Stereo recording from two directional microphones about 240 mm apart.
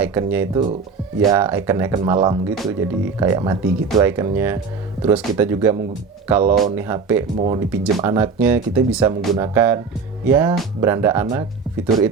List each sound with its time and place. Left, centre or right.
0.0 s speech: centre
6.4 s speech: right
6.7 s speech: centre
7.3 s speech: right
7.7 s speech: centre
11.9 s speech: centre